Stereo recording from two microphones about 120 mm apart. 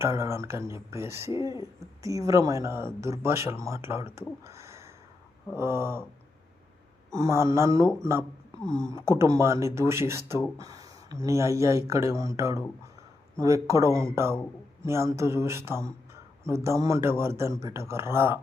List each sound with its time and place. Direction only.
0.0 s speech: 25° right (ahead or behind)
7.1 s speech: 25° right (ahead or behind)